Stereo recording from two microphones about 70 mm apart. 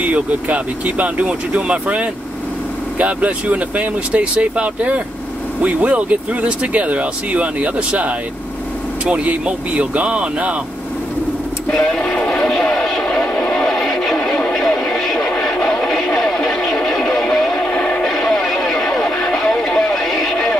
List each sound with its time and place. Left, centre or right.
0.0 s speech: right
11.7 s a sound: centre
17.6 s music: centre